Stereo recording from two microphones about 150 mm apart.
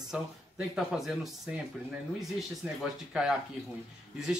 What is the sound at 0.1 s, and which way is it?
Speech, 5° right (ahead or behind).